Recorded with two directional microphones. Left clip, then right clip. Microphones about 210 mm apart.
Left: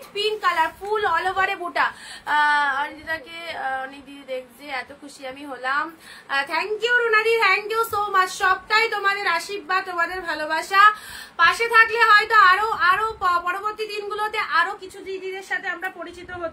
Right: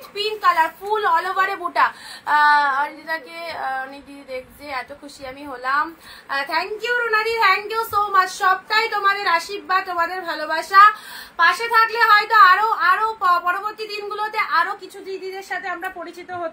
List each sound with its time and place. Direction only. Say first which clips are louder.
0.1 s a woman's voice: right 3 dB; 20° left (ahead or behind)